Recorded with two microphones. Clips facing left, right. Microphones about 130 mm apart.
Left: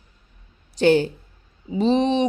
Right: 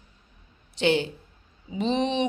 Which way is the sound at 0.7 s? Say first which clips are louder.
Left 6 dB; 45° left (ahead or behind).